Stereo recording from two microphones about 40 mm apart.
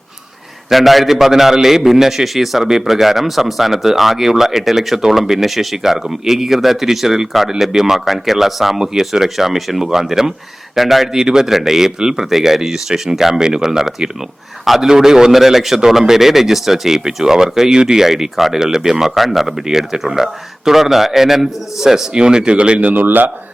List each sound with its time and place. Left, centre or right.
0.7 s a man's voice: centre
22.1 s speech: right
23.0 s speech: right